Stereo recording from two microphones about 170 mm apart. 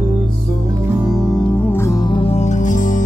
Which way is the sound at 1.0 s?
Centre (ahead or behind).